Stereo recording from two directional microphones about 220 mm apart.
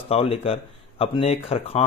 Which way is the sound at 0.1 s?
25° left (ahead or behind).